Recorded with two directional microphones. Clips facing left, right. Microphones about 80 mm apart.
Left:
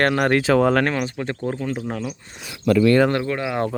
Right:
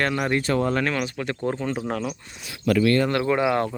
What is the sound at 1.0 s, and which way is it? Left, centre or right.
Speech, left.